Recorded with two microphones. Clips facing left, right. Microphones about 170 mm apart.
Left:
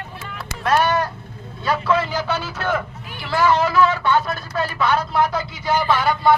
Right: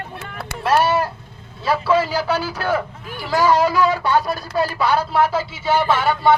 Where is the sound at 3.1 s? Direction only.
40° right (ahead or behind).